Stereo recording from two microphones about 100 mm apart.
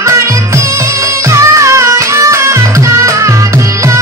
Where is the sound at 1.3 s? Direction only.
30° right (ahead or behind).